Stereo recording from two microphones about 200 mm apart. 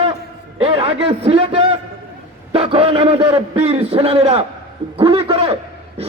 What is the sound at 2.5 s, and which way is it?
A man's voice, 25° right (ahead or behind).